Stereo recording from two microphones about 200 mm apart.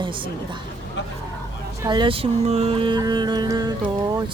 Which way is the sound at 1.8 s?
25° right (ahead or behind).